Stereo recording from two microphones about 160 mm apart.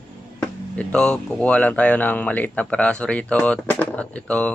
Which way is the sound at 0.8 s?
5° left (ahead or behind).